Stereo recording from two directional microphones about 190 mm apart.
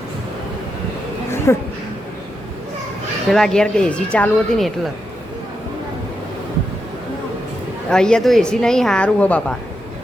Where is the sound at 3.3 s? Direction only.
Centre (ahead or behind).